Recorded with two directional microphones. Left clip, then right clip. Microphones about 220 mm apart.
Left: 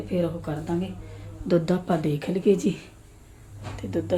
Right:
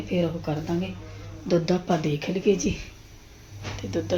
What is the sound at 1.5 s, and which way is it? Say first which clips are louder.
Speech: left 1 dB; 15° left (ahead or behind).